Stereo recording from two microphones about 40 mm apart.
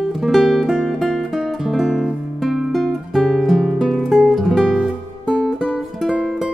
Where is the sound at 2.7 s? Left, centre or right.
Centre.